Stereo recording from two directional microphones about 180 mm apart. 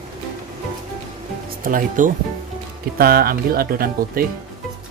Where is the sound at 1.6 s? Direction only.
50° right (ahead or behind).